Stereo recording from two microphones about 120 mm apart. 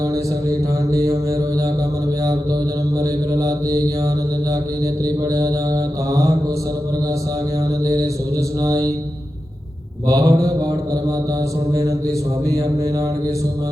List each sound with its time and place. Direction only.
0.0 s mantra: 25° right (ahead or behind)
3.0 s mantra: 30° right (ahead or behind)
5.2 s mantra: 30° right (ahead or behind)
7.9 s mantra: 25° right (ahead or behind)
10.1 s mantra: 30° right (ahead or behind)
11.7 s mantra: 25° right (ahead or behind)